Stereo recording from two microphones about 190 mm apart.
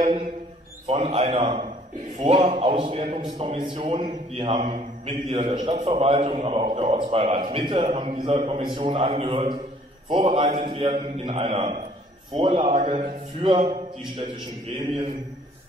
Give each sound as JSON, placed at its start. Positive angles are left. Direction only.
{"t": 0.0, "sound": "a man's voice", "side_deg": -35}